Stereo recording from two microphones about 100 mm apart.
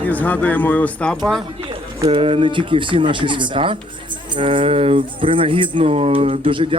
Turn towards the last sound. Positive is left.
turn(degrees=-65)  # may be behind; listen again after turning